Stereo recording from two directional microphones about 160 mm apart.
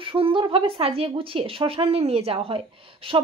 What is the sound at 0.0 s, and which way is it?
Speech, 35° right (ahead or behind).